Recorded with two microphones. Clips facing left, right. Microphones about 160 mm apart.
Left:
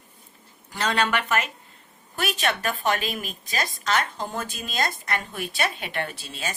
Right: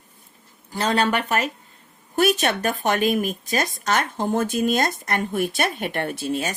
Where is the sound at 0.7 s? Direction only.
35° right (ahead or behind).